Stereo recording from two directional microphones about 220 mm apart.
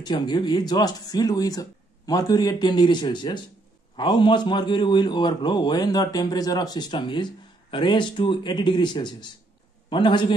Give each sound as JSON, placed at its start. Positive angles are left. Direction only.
{"t": 0.0, "sound": "a man's voice", "side_deg": 20}